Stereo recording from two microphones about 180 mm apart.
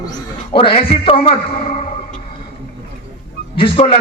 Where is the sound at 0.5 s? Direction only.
30° left (ahead or behind).